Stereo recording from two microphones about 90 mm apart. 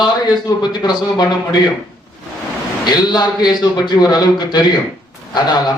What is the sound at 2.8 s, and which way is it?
A man's voice, 50° left (ahead or behind).